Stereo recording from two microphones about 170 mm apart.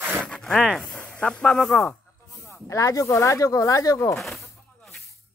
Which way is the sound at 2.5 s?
20° left (ahead or behind).